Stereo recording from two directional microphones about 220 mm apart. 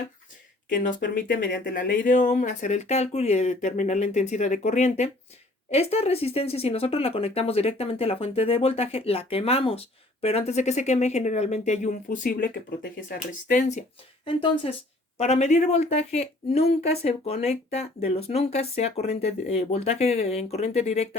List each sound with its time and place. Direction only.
0.7 s speech: 35° left (ahead or behind)
14.3 s speech: 25° left (ahead or behind)